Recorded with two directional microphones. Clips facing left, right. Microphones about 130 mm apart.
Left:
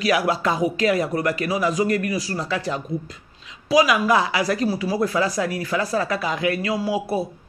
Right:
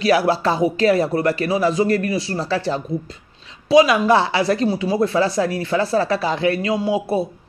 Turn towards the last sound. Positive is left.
turn(degrees=-25)  # may be behind; listen again after turning